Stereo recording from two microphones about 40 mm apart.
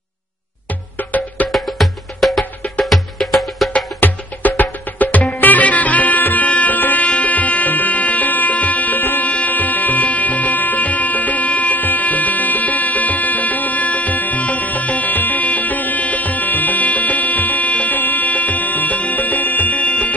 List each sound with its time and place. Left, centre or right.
0.9 s music: left
1.5 s music: centre
4.0 s music: left